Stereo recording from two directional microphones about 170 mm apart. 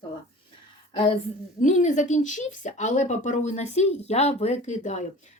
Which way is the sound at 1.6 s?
45° left (ahead or behind).